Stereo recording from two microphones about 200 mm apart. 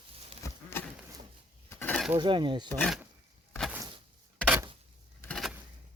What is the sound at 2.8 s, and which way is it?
Speech, centre (ahead or behind).